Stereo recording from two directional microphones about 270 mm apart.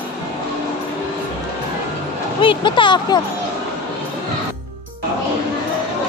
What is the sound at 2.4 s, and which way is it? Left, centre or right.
Speech, centre.